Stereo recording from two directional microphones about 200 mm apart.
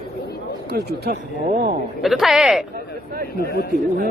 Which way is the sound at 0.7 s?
50° right (ahead or behind).